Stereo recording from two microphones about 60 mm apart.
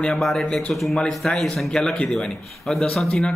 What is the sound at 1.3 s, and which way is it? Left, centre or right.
Speech, centre.